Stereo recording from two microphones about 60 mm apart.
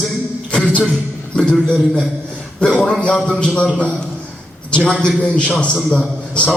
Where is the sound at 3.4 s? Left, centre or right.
Centre.